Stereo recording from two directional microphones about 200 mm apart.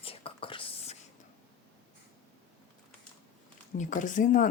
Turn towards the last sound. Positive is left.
turn(degrees=40)  # may be behind; listen again after turning